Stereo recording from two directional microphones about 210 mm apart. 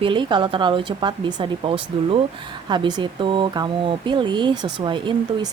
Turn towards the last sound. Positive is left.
turn(degrees=-20)  # may be behind; listen again after turning